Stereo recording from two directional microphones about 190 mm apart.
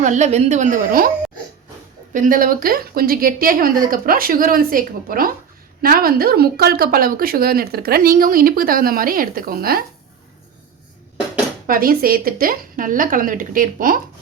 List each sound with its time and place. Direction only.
0.0 s a woman's voice: 40° right (ahead or behind)
2.1 s speech: 45° right (ahead or behind)
11.6 s speech: 50° right (ahead or behind)